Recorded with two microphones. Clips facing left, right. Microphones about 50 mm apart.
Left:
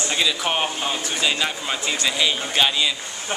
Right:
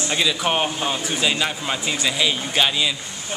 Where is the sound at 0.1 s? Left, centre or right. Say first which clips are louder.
Right 2 dB; centre.